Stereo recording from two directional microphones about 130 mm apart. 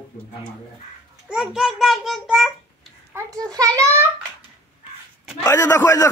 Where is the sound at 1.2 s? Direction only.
5° right (ahead or behind).